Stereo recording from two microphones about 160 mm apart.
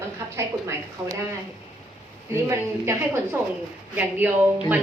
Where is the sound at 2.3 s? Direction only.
15° right (ahead or behind).